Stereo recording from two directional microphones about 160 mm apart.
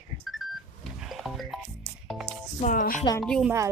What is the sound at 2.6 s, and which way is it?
Speech, 55° left (ahead or behind).